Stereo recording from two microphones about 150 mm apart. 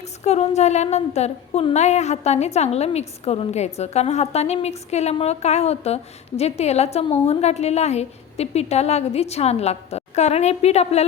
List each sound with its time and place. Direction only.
0.0 s a woman's voice: 45° left (ahead or behind)